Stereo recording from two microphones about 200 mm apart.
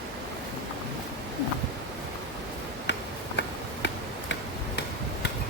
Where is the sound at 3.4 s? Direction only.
60° left (ahead or behind).